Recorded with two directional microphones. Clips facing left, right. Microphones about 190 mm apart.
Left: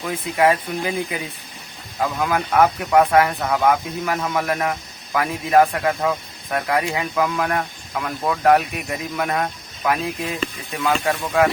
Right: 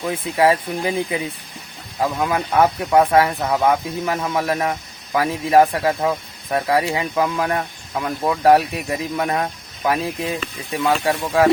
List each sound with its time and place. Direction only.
0.0 s speech: 30° right (ahead or behind)